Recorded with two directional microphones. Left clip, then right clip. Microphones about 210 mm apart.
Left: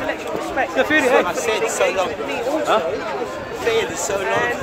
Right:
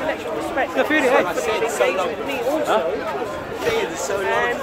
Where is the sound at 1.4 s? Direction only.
45° left (ahead or behind).